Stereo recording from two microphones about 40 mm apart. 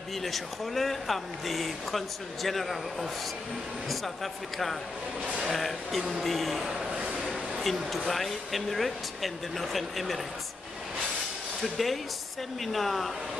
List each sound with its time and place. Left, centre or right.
0.2 s speech: centre
6.9 s vehicle: right
7.6 s speech: centre
11.6 s speech: centre